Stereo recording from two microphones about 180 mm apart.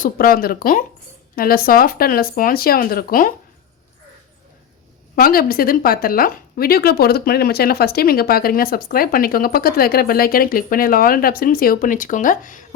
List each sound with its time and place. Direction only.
0.0 s speech: 50° left (ahead or behind)
5.1 s speech: 55° left (ahead or behind)